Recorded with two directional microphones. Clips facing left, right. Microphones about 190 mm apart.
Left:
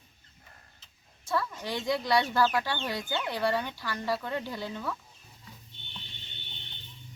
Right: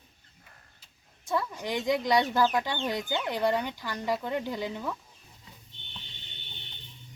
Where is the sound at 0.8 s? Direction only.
20° right (ahead or behind).